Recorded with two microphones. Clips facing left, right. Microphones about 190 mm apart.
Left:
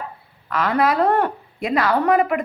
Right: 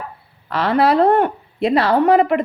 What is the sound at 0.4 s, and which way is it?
Speech, 30° right (ahead or behind).